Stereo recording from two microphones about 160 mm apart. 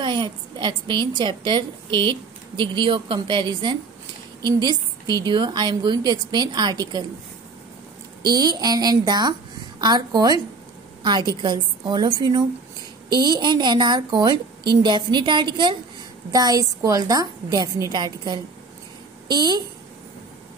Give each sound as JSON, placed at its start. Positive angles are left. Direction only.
{"t": 0.0, "sound": "a woman's voice", "side_deg": -30}
{"t": 8.2, "sound": "a woman's voice", "side_deg": -25}